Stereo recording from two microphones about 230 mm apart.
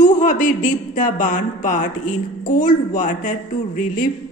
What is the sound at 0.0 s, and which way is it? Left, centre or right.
A man's voice, left.